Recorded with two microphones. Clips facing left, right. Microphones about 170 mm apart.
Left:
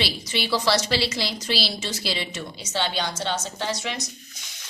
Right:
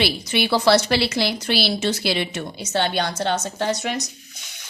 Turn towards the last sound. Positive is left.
turn(degrees=-50)  # may be behind; listen again after turning